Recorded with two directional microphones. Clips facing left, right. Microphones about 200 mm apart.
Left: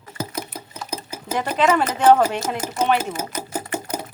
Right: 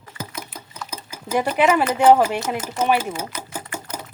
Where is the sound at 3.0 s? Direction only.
40° left (ahead or behind).